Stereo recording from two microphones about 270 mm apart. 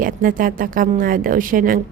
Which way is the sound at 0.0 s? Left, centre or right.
Right.